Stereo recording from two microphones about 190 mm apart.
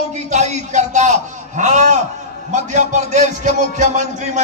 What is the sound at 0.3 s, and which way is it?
A man's voice, 35° right (ahead or behind).